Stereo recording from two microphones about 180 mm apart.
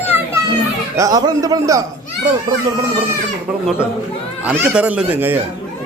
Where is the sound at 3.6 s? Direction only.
5° right (ahead or behind).